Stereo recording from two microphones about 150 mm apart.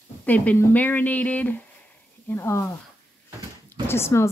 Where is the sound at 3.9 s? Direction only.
15° left (ahead or behind).